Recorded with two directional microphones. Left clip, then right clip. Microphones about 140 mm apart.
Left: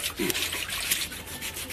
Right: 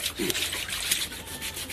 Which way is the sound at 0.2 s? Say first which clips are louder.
Left 1 dB; 10° left (ahead or behind).